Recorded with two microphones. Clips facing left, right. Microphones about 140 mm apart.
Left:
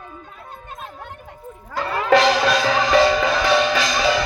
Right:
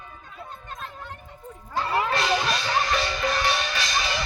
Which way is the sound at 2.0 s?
90° left.